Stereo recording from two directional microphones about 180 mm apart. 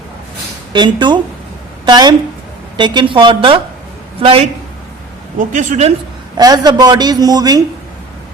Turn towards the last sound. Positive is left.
turn(degrees=-20)  # may be behind; listen again after turning